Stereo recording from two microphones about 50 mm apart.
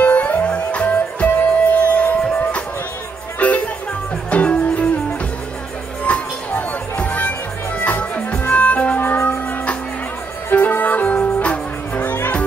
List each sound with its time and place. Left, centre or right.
0.0 s music: left
6.0 s music: left
8.9 s music: left
10.5 s music: left